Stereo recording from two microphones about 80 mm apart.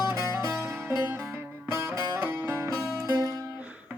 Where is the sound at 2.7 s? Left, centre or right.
Right.